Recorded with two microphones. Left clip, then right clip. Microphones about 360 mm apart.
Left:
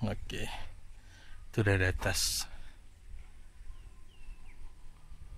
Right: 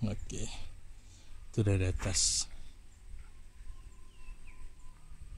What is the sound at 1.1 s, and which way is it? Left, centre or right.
A man's voice, left.